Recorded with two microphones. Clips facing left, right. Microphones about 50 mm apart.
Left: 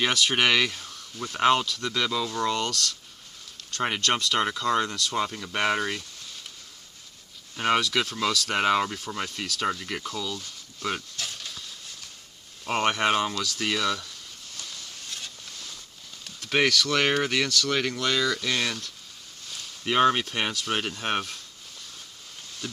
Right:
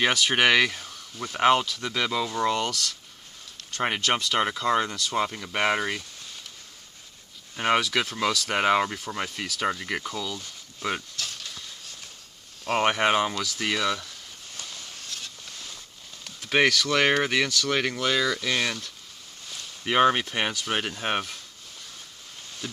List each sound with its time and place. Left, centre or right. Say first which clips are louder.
0.0 s speech: right 2 dB; centre
7.5 s speech: even; centre
12.6 s speech: right 1 dB; centre
16.4 s speech: right 1 dB; centre